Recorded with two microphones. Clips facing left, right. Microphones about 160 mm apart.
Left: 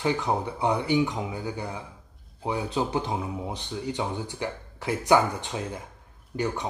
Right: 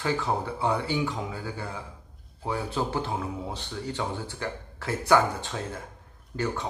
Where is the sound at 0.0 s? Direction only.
20° left (ahead or behind).